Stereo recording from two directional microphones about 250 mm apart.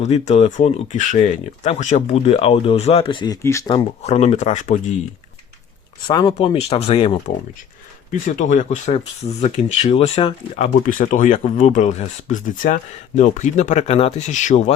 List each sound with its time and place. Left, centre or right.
0.0 s speech: left
4.0 s speech: left
6.1 s speech: centre